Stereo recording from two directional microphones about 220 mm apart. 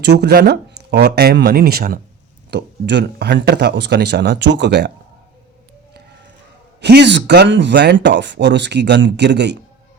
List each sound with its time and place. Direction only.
0.0 s speech: 50° right (ahead or behind)
6.8 s speech: 50° right (ahead or behind)